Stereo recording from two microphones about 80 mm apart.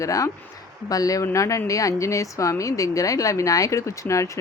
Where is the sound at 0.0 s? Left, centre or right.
Left.